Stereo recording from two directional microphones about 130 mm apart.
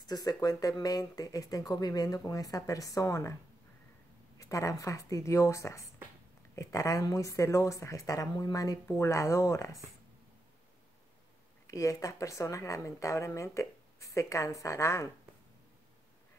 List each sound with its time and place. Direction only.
0.0 s speech: 30° left (ahead or behind)
4.4 s speech: 25° left (ahead or behind)
11.6 s speech: 25° left (ahead or behind)